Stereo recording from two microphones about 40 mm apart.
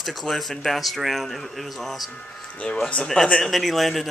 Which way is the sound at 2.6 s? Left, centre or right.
Left.